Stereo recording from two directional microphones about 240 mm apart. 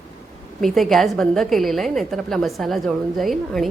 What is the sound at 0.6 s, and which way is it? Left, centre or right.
A woman's voice, centre.